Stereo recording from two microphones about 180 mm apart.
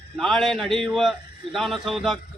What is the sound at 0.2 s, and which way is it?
A man's voice, centre (ahead or behind).